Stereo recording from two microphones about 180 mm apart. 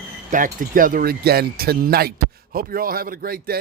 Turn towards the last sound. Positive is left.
turn(degrees=-55)  # may be behind; listen again after turning